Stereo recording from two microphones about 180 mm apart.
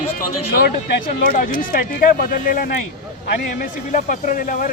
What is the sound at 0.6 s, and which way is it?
Speech, 55° left (ahead or behind).